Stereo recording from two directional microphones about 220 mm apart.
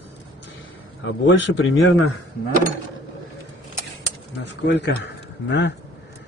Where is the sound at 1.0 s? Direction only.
55° left (ahead or behind).